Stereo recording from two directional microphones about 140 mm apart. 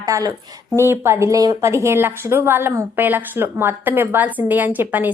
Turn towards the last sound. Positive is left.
turn(degrees=-15)  # may be behind; listen again after turning